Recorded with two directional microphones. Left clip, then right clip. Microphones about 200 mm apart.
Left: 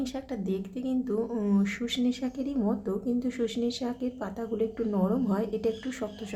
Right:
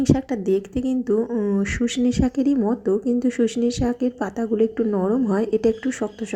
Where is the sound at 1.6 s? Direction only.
25° right (ahead or behind).